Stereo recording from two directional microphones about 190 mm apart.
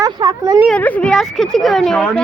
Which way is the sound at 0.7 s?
10° left (ahead or behind).